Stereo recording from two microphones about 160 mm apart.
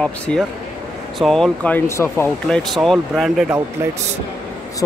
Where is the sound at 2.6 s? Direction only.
Centre (ahead or behind).